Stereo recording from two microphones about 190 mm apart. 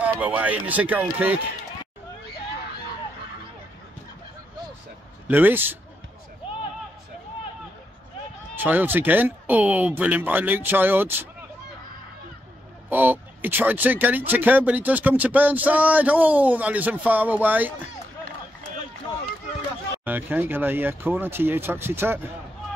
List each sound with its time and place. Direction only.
0.0 s speech: 10° right (ahead or behind)
5.3 s speech: 10° right (ahead or behind)
8.5 s speech: 10° right (ahead or behind)
12.9 s speech: 10° right (ahead or behind)
20.1 s speech: 10° right (ahead or behind)